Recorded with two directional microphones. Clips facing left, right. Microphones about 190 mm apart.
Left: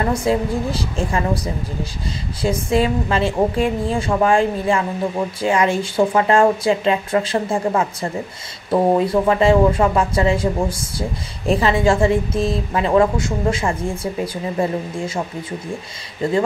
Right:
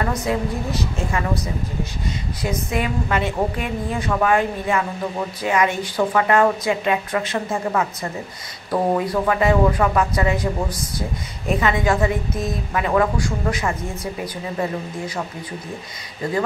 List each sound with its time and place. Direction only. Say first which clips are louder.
0.0 s speech: left 4 dB; 30° left (ahead or behind)
2.4 s speech: left 6 dB; 30° left (ahead or behind)